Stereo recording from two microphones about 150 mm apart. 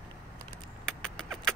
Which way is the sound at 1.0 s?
5° left (ahead or behind).